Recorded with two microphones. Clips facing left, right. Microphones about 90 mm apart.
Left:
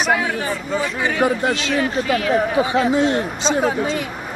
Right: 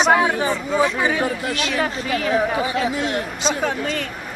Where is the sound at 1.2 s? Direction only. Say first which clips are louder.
Left 5 dB; 25° left (ahead or behind).